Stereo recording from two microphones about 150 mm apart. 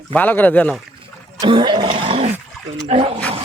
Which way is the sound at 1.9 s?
40° right (ahead or behind).